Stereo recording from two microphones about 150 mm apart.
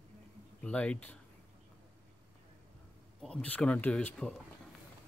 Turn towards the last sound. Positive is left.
turn(degrees=5)  # may be behind; listen again after turning